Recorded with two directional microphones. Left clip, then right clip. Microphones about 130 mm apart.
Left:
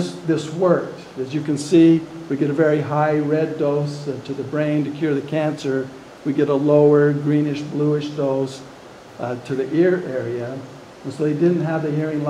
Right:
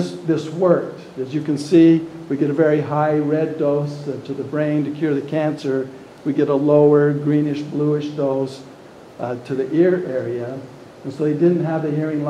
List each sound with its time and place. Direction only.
0.0 s speech: 10° left (ahead or behind)